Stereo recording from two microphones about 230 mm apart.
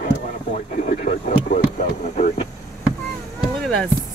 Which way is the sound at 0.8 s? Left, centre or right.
Left.